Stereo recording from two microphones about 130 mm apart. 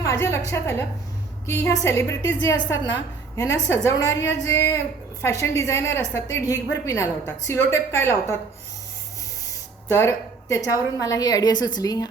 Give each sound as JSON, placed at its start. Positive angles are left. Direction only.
{"t": 0.0, "sound": "a woman's voice", "side_deg": 20}
{"t": 9.9, "sound": "a woman's voice", "side_deg": 20}